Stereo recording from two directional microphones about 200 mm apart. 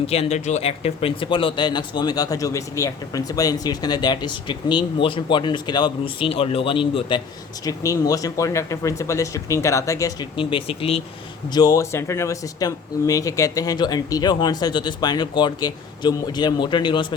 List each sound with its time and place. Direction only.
0.1 s speech: 30° left (ahead or behind)
11.5 s speech: 20° left (ahead or behind)